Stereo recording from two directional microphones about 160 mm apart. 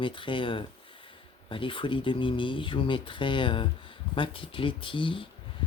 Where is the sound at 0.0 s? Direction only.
30° left (ahead or behind).